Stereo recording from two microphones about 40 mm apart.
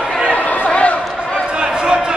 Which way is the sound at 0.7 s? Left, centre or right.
Left.